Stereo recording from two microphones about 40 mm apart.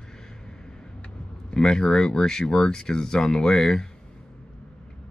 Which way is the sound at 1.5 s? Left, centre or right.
Centre.